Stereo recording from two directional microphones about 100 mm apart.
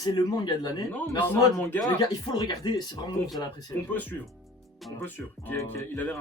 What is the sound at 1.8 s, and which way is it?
Speech, 40° left (ahead or behind).